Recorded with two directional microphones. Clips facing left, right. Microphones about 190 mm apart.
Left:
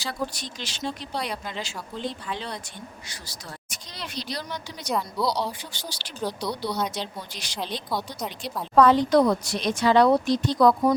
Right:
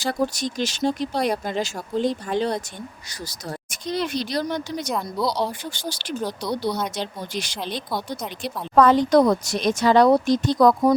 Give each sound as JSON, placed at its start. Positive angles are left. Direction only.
{"t": 0.0, "sound": "speech", "side_deg": -45}